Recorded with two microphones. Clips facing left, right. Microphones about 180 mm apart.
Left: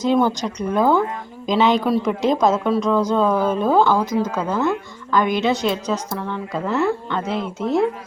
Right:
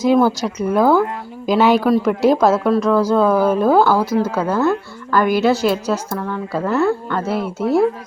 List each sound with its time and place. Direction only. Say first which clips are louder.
0.0 s a woman's voice: right 4 dB; 10° right (ahead or behind)